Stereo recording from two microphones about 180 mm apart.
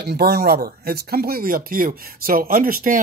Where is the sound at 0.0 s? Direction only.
65° right (ahead or behind).